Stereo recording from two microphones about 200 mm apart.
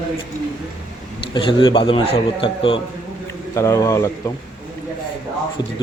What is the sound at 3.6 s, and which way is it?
Speech, 15° left (ahead or behind).